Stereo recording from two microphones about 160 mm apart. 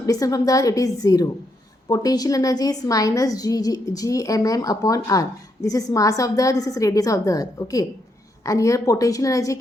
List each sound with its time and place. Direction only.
0.0 s a woman's voice: 20° left (ahead or behind)